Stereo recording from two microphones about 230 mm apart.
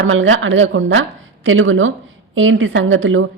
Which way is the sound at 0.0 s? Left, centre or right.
Right.